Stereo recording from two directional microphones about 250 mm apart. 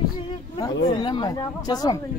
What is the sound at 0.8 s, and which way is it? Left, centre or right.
Speech, centre.